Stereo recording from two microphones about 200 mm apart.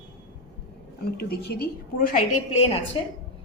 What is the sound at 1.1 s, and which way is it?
Speech, 50° left (ahead or behind).